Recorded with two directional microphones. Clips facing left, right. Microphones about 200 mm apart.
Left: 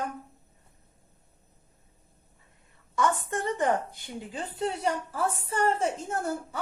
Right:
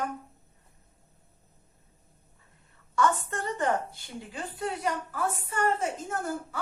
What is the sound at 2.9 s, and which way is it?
A woman's voice, 15° left (ahead or behind).